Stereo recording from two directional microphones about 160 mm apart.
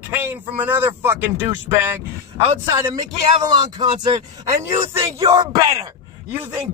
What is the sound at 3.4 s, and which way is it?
Speech, 30° right (ahead or behind).